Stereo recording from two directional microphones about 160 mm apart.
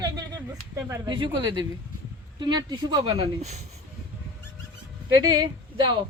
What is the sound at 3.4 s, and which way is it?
Speech, 45° right (ahead or behind).